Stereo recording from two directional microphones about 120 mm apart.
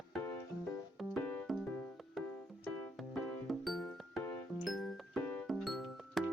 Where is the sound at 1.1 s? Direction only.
10° left (ahead or behind).